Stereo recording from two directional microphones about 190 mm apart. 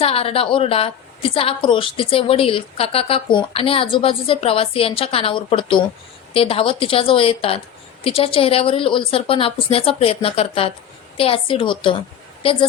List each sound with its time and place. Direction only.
0.0 s a woman's voice: 30° left (ahead or behind)